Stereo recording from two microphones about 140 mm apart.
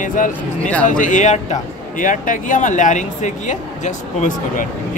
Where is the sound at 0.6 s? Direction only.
10° left (ahead or behind).